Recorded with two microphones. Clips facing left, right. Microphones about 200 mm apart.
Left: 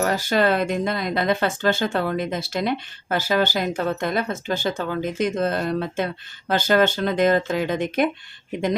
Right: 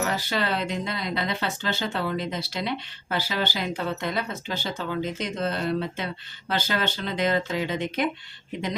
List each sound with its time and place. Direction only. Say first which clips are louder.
0.0 s speech: left 7 dB; 45° left (ahead or behind)